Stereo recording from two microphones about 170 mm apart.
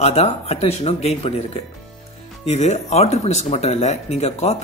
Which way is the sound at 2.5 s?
40° left (ahead or behind).